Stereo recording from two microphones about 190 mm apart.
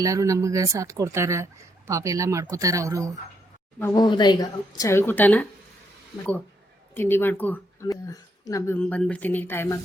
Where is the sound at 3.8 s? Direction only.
20° left (ahead or behind).